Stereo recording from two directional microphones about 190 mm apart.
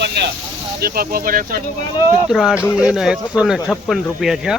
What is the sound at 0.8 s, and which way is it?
Speech, 55° right (ahead or behind).